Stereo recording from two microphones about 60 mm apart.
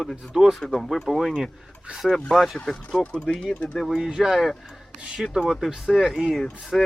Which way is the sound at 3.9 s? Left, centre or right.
Centre.